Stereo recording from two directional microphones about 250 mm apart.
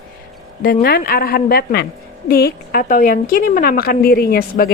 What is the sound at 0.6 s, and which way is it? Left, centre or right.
A woman's voice, left.